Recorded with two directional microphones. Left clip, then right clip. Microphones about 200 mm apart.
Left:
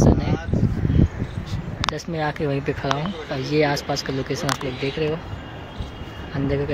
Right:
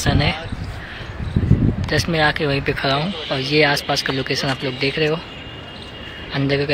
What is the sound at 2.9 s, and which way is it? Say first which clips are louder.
Speech: right 4 dB; 15° right (ahead or behind).